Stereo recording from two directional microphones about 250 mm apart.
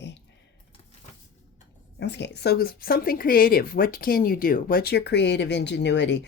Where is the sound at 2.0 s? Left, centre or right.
Left.